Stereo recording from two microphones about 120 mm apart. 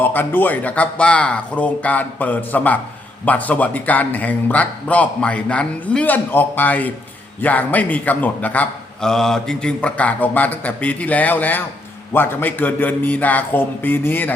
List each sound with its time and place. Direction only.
0.0 s a man's voice: 15° left (ahead or behind)